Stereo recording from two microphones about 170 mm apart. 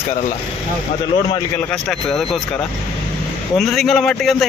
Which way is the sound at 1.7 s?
5° left (ahead or behind).